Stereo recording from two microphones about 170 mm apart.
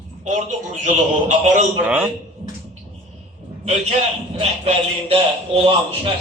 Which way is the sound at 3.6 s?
40° right (ahead or behind).